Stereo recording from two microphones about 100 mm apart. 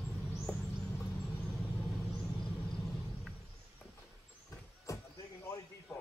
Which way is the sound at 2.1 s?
5° left (ahead or behind).